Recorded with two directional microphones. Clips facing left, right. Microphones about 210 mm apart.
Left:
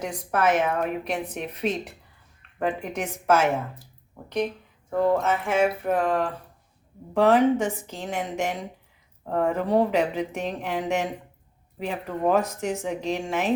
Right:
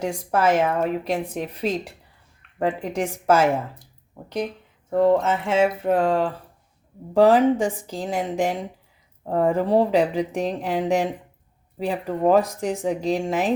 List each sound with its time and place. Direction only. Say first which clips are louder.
0.0 s speech: right 3 dB; 30° right (ahead or behind)
4.9 s speech: right 4 dB; 25° right (ahead or behind)